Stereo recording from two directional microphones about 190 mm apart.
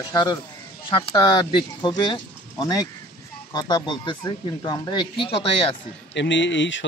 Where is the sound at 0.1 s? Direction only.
25° left (ahead or behind).